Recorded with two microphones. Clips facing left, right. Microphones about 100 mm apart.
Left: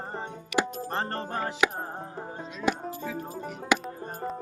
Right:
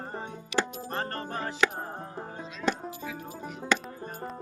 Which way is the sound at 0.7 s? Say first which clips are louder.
Left 3 dB; 25° left (ahead or behind).